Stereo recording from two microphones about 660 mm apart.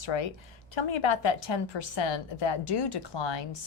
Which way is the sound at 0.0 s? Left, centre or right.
Left.